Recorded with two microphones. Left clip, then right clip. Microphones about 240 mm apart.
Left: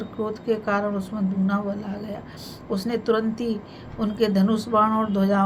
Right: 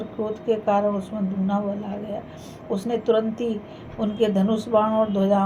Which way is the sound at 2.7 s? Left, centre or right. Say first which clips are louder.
Right 2 dB; left.